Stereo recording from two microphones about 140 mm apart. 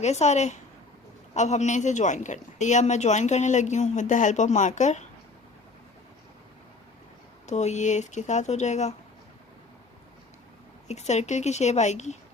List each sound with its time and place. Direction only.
0.0 s a man's voice: 55° left (ahead or behind)
7.4 s a man's voice: 55° left (ahead or behind)
10.8 s a man's voice: 55° left (ahead or behind)